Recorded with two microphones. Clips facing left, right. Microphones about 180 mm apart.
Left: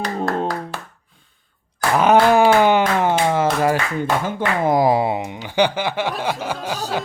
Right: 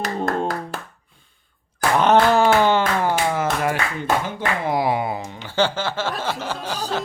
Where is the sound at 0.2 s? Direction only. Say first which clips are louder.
Left 1 dB; 5° left (ahead or behind).